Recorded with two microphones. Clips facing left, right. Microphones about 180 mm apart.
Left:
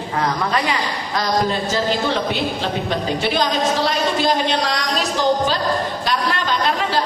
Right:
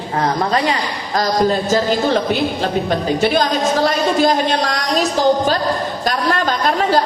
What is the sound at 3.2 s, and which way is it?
A woman's voice, 45° right (ahead or behind).